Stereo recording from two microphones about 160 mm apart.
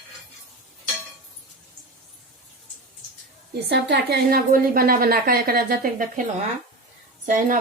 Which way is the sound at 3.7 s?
90° right.